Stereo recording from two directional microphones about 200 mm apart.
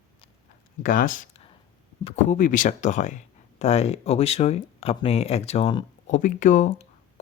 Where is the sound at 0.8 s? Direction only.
40° left (ahead or behind).